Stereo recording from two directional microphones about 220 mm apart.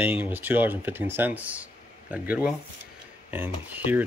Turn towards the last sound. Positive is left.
turn(degrees=-10)  # may be behind; listen again after turning